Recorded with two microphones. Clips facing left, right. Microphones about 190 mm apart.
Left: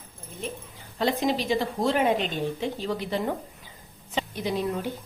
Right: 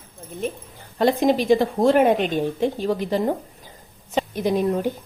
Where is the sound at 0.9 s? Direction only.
50° right (ahead or behind).